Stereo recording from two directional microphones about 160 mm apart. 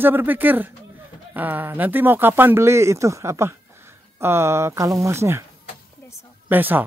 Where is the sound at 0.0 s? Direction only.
10° right (ahead or behind).